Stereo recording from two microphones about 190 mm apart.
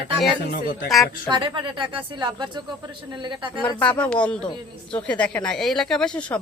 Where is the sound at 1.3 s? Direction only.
25° right (ahead or behind).